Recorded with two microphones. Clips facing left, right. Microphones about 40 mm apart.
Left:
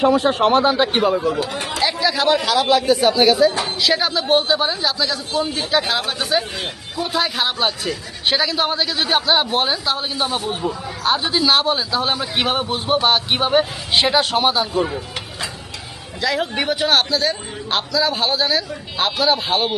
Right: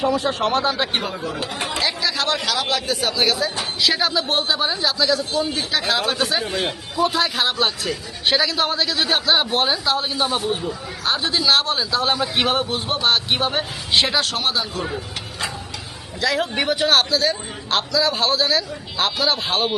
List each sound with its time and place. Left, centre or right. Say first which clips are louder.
0.0 s speech: left 5 dB; left
0.8 s a man's voice: left 7 dB; centre
1.4 s speech: left 2 dB; right
1.8 s a man's voice: left 6 dB; centre
16.2 s a man's voice: even; centre